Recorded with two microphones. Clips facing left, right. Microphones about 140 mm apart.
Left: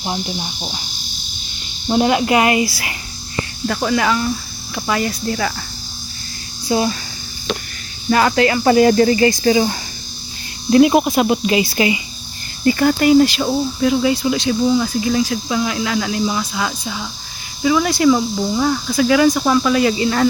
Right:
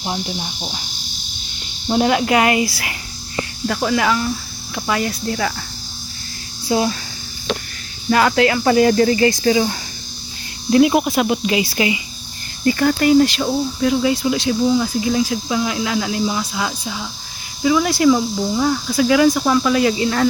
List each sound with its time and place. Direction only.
0.0 s speech: 5° left (ahead or behind)
2.0 s speech: 15° left (ahead or behind)
3.7 s speech: 5° right (ahead or behind)
6.7 s speech: 5° right (ahead or behind)
8.1 s speech: 5° left (ahead or behind)
8.6 s cricket: 30° left (ahead or behind)
10.7 s speech: 35° left (ahead or behind)
12.6 s speech: 15° left (ahead or behind)